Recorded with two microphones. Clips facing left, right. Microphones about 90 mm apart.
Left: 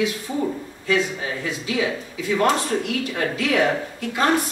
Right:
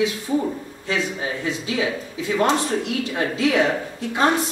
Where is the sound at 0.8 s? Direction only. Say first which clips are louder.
Left 2 dB; 25° right (ahead or behind).